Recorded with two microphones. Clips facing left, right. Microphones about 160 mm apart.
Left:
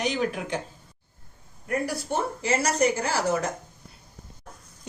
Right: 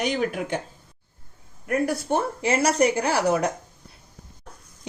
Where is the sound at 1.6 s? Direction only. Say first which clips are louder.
Right 4 dB; 55° right (ahead or behind).